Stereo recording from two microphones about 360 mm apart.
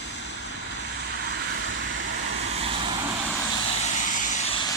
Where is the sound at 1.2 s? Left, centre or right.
Right.